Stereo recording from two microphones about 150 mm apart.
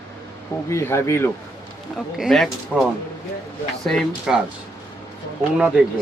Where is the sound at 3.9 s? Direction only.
Centre (ahead or behind).